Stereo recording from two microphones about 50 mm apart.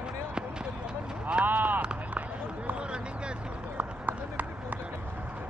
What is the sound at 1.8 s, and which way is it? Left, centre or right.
Run, right.